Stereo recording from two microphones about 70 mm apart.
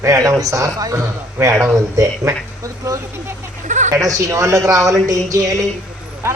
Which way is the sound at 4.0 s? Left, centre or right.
Right.